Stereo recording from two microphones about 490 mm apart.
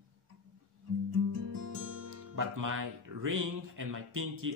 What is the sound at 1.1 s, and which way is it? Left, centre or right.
Music, right.